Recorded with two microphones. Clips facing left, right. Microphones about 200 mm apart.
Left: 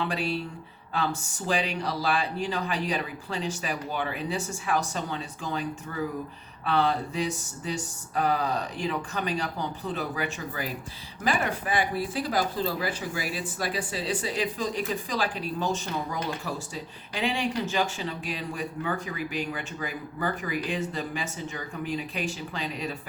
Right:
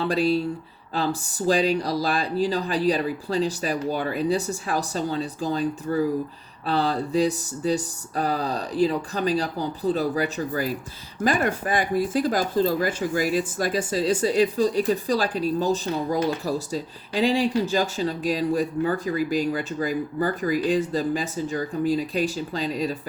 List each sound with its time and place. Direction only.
0.0 s speech: 35° right (ahead or behind)